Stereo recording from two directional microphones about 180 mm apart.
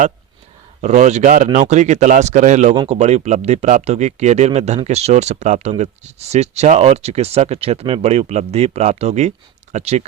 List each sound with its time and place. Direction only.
0.8 s speech: 40° right (ahead or behind)